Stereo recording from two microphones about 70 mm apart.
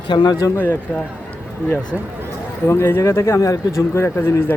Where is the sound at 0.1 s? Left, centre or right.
Left.